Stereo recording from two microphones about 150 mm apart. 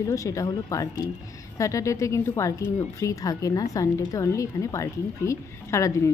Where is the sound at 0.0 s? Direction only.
20° left (ahead or behind).